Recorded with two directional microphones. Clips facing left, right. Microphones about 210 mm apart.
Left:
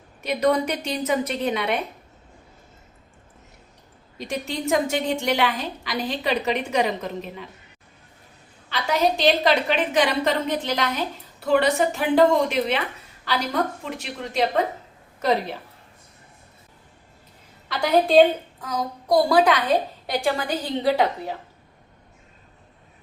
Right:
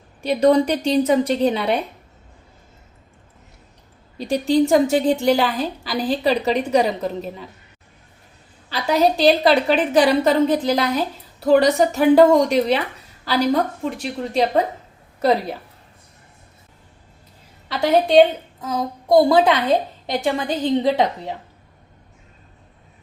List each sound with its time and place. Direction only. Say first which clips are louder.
0.2 s a woman's voice: right 6 dB; 30° right (ahead or behind)
4.2 s a woman's voice: right 11 dB; 35° right (ahead or behind)
8.7 s a woman's voice: right 4 dB; 35° right (ahead or behind)
14.0 s a woman's voice: right 3 dB; 35° right (ahead or behind)
17.7 s a woman's voice: right 3 dB; 25° right (ahead or behind)